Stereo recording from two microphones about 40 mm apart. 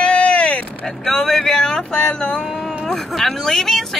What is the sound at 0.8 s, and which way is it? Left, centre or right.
Speech, centre.